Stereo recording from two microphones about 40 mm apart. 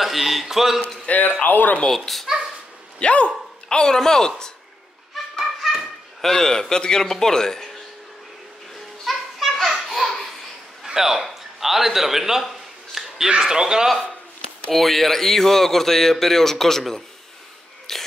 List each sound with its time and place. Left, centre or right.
0.0 s speech: centre
1.0 s speech: left
1.9 s speech: centre
3.0 s speech: left
3.6 s a man's voice: centre
5.4 s speech: centre
9.0 s a sound: centre
10.9 s speech: centre
11.2 s a sound: centre
13.4 s a man's voice: centre
14.7 s a man's voice: centre
17.9 s a sound: centre